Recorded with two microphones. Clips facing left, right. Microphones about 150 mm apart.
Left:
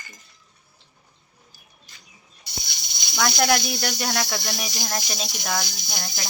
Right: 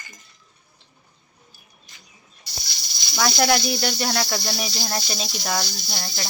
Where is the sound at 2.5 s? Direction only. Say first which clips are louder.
Left 1 dB; 20° left (ahead or behind).